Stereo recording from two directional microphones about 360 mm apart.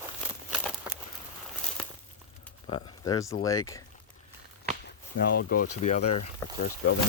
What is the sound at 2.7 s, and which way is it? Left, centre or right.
Speech, centre.